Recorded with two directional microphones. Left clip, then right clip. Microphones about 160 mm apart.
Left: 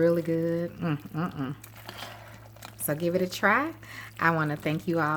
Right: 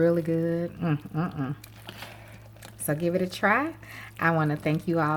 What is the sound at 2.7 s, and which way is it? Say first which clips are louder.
Speech: right 1 dB; centre (ahead or behind).